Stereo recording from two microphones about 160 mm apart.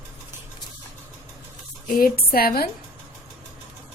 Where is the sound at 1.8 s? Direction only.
60° left (ahead or behind).